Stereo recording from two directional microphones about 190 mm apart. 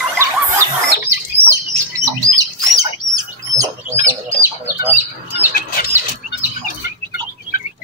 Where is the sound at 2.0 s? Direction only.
15° right (ahead or behind).